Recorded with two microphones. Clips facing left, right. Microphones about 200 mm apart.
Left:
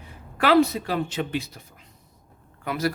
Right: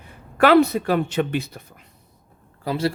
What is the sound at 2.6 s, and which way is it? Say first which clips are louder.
Speech: right 3 dB; 30° right (ahead or behind).